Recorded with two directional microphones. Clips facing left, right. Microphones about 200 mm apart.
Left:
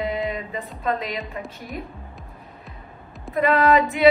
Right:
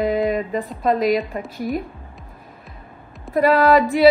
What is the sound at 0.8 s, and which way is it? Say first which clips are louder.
Speech: right 8 dB; 40° right (ahead or behind).